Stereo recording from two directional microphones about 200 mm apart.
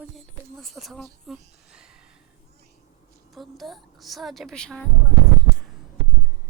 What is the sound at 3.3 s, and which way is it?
Speech, centre (ahead or behind).